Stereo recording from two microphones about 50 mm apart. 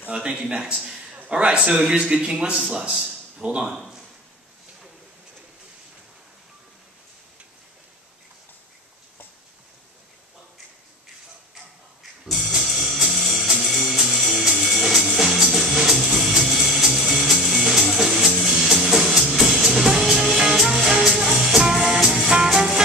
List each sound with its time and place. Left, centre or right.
0.1 s a man's voice: centre
2.5 s a man's voice: centre
2.8 s a sound: centre
3.4 s a man's voice: centre
3.7 s a sound: centre
12.3 s music: centre